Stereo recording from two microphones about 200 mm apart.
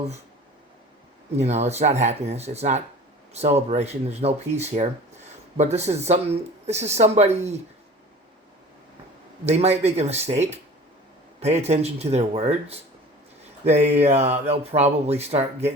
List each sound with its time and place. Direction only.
1.4 s speech: 35° right (ahead or behind)
9.5 s speech: 30° right (ahead or behind)